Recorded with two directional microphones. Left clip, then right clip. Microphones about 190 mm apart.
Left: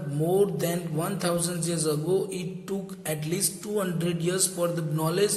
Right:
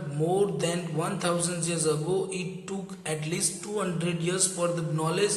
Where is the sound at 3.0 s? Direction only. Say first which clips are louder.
Even; 35° left (ahead or behind).